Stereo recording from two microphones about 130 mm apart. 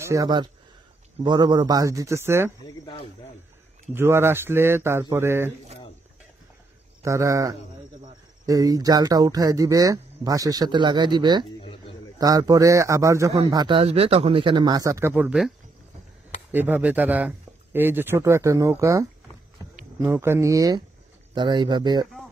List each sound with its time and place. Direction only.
0.0 s speech: 25° right (ahead or behind)
1.2 s speech: 35° right (ahead or behind); by 2.5 s 20° right (ahead or behind)
3.9 s speech: 20° right (ahead or behind)
7.0 s speech: 25° right (ahead or behind)
13.5 s speech: 35° right (ahead or behind); by 15.5 s 5° right (ahead or behind)
16.5 s speech: 15° right (ahead or behind); by 22.0 s 35° right (ahead or behind)